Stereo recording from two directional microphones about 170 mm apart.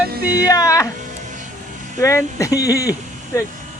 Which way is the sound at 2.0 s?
20° left (ahead or behind).